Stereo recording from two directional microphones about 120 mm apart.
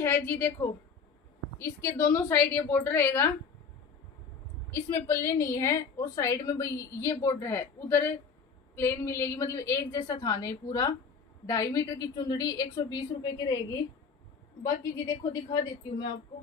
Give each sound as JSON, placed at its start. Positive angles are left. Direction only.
{"t": 0.0, "sound": "a woman's voice", "side_deg": 20}
{"t": 4.6, "sound": "a woman's voice", "side_deg": 20}
{"t": 15.5, "sound": "a woman's voice", "side_deg": 40}